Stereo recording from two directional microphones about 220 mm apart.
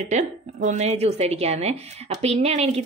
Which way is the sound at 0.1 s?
35° right (ahead or behind).